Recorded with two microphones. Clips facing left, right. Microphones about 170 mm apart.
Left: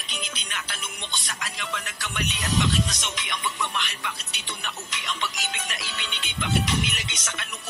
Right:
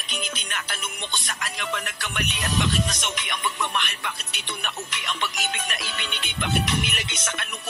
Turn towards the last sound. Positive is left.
turn(degrees=-55)  # may be behind; listen again after turning